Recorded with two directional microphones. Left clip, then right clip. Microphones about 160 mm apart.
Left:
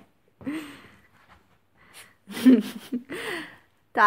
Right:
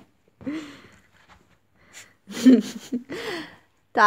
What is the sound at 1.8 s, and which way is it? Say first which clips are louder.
Gasp: right 2 dB; centre (ahead or behind).